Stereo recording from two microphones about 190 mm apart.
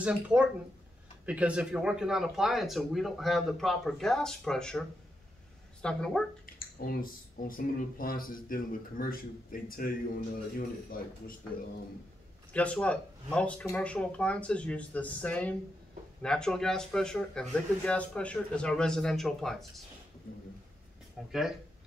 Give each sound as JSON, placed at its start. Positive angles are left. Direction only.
{"t": 0.0, "sound": "speech", "side_deg": -5}
{"t": 6.4, "sound": "speech", "side_deg": 50}
{"t": 12.5, "sound": "speech", "side_deg": 5}
{"t": 21.2, "sound": "speech", "side_deg": 0}